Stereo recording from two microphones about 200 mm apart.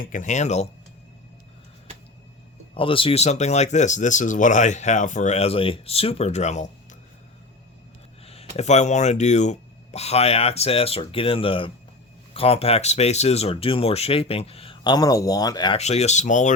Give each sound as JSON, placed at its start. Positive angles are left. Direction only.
{"t": 0.0, "sound": "speech", "side_deg": 40}
{"t": 2.7, "sound": "speech", "side_deg": 25}
{"t": 8.2, "sound": "speech", "side_deg": 30}
{"t": 15.8, "sound": "speech", "side_deg": 35}